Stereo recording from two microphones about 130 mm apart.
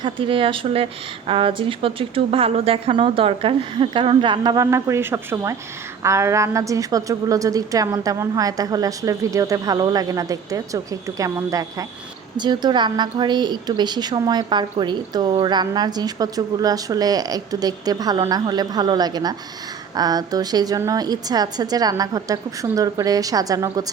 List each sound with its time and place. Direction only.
0.0 s speech: 40° right (ahead or behind)
4.5 s a woman's voice: 25° right (ahead or behind)